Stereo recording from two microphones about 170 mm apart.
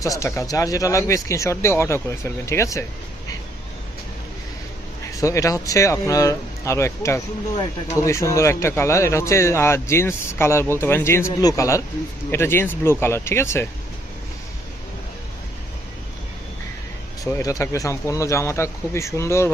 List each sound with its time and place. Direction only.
0.0 s a man's voice: 20° left (ahead or behind)
5.1 s a man's voice: 20° left (ahead or behind)
17.3 s a man's voice: 20° left (ahead or behind)